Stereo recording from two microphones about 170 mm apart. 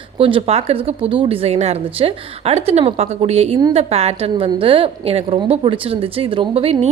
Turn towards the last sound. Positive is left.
turn(degrees=-35)  # may be behind; listen again after turning